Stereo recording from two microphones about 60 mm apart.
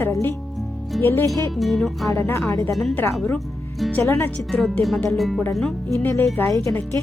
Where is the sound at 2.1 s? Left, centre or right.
Left.